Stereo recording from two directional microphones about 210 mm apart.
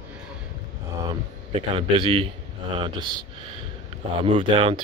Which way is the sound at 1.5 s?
25° right (ahead or behind).